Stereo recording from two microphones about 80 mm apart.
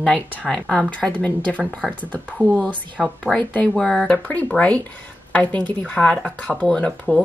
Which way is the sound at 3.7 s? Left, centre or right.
Centre.